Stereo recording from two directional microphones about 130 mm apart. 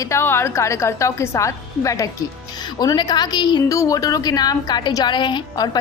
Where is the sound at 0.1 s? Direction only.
20° left (ahead or behind).